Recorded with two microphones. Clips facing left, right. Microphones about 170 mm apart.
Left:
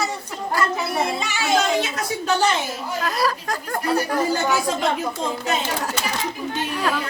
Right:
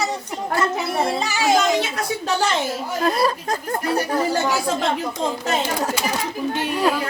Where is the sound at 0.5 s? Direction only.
25° right (ahead or behind).